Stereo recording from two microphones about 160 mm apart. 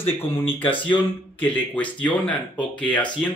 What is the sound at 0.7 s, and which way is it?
Speech, 30° left (ahead or behind).